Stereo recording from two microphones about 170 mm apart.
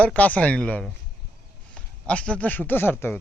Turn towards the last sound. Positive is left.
turn(degrees=15)  # may be behind; listen again after turning